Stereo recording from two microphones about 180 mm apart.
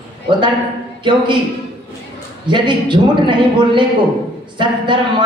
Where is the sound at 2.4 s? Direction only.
25° right (ahead or behind).